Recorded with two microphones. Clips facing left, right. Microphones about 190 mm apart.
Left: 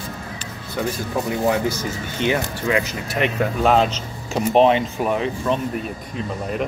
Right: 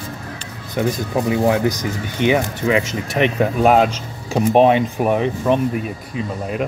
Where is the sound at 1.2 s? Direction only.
15° right (ahead or behind).